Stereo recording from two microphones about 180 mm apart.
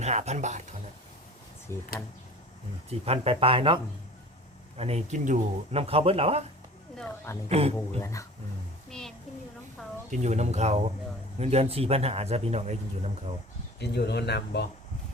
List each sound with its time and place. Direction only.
0.0 s speech: 40° right (ahead or behind)
1.7 s speech: 15° left (ahead or behind)
3.1 s speech: 30° right (ahead or behind)
4.8 s speech: 35° right (ahead or behind)
6.9 s speech: 5° left (ahead or behind)
7.4 s speech: 35° right (ahead or behind)
8.0 s speech: 15° left (ahead or behind)
8.9 s a child's voice: 5° left (ahead or behind)
10.1 s speech: 40° right (ahead or behind)
13.7 s speech: 65° left (ahead or behind)